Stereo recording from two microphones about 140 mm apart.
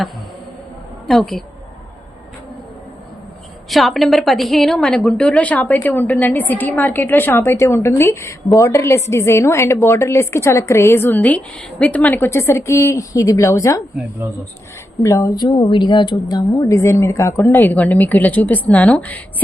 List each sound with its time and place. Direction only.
1.0 s a woman's voice: centre (ahead or behind)
3.7 s a woman's voice: centre (ahead or behind); by 13.8 s 20° left (ahead or behind)
15.0 s a woman's voice: 25° left (ahead or behind)